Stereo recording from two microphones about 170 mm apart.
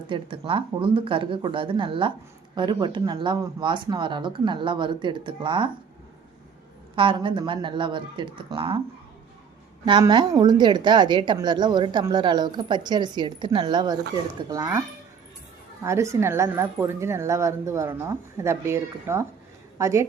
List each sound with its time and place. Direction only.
0.1 s a woman's voice: 30° right (ahead or behind)
6.9 s a woman's voice: 30° right (ahead or behind)
9.8 s a woman's voice: 30° right (ahead or behind)
15.8 s a woman's voice: 15° right (ahead or behind)